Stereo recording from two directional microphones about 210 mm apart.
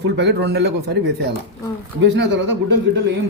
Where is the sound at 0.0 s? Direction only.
55° right (ahead or behind).